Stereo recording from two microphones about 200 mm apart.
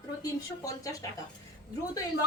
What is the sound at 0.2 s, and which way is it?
Speech, 15° left (ahead or behind).